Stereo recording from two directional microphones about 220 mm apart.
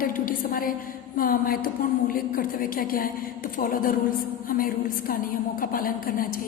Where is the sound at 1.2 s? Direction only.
40° left (ahead or behind).